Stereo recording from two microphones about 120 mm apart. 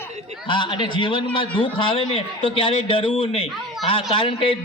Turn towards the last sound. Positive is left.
turn(degrees=45)  # may be behind; listen again after turning